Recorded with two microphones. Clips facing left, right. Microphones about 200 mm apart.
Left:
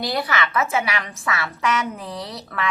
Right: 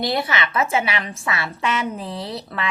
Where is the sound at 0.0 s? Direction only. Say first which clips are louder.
Right 1 dB; 25° right (ahead or behind).